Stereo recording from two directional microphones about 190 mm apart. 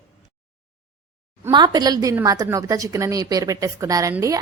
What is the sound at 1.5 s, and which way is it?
A woman's voice, 20° right (ahead or behind).